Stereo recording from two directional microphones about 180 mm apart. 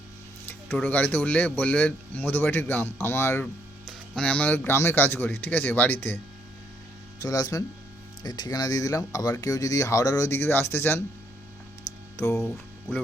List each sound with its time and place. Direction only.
0.4 s speech: 10° left (ahead or behind)
7.2 s speech: 20° left (ahead or behind)
12.1 s speech: 15° left (ahead or behind)